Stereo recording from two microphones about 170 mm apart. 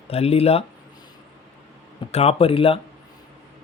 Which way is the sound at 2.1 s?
35° left (ahead or behind).